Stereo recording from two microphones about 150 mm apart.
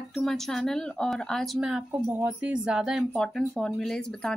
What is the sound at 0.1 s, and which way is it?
Speech, centre (ahead or behind).